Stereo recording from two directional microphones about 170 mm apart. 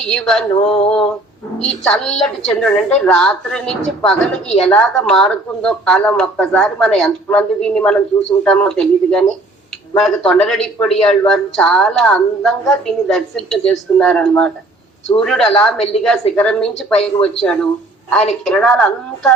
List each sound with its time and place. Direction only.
0.0 s speech: 5° left (ahead or behind)
0.5 s male singing: 35° left (ahead or behind)
1.6 s speech: 5° left (ahead or behind)